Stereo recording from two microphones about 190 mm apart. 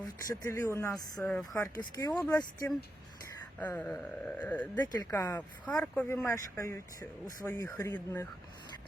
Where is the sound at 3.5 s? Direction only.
10° left (ahead or behind).